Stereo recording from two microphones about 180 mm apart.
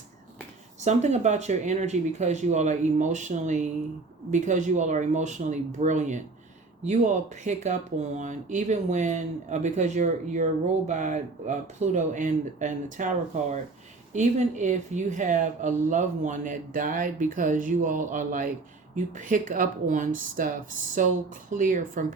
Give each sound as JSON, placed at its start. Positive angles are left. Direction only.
{"t": 0.8, "sound": "speech", "side_deg": -40}